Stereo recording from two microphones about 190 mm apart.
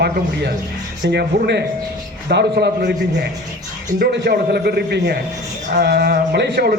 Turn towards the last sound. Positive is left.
turn(degrees=-60)  # may be behind; listen again after turning